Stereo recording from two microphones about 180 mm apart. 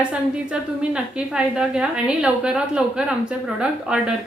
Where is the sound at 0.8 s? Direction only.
5° right (ahead or behind).